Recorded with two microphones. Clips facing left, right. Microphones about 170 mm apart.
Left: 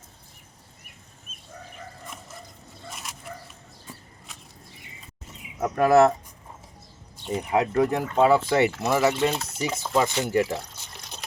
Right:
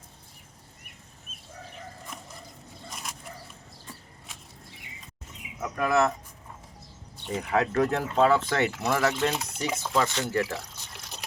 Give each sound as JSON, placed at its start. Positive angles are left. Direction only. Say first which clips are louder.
{"t": 5.5, "sound": "speech", "louder": "left 7 dB", "side_deg": 40}
{"t": 7.3, "sound": "speech", "louder": "left 3 dB", "side_deg": 15}